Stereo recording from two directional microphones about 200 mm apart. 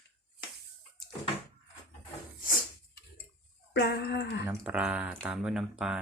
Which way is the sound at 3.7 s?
60° left (ahead or behind).